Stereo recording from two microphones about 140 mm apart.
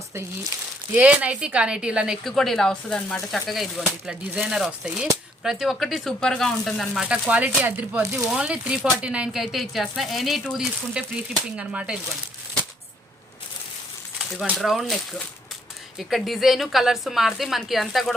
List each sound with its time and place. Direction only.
0.9 s speech: 10° right (ahead or behind)
14.3 s speech: centre (ahead or behind)